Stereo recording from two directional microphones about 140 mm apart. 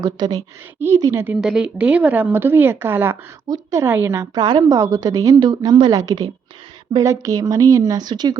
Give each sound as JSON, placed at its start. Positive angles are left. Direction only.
{"t": 0.0, "sound": "a woman's voice", "side_deg": -25}
{"t": 4.4, "sound": "speech", "side_deg": -30}